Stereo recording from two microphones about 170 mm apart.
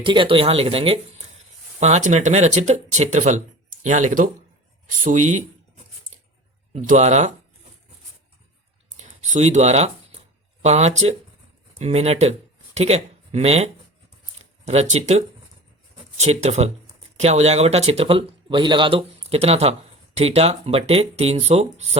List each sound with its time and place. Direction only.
0.0 s speech: 30° right (ahead or behind); by 5.4 s 50° right (ahead or behind)
6.7 s speech: 45° right (ahead or behind)
9.0 s a sound: 45° right (ahead or behind)
11.8 s speech: 40° right (ahead or behind)